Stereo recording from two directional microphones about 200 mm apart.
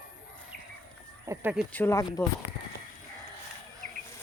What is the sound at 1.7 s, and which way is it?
Speech, 10° left (ahead or behind).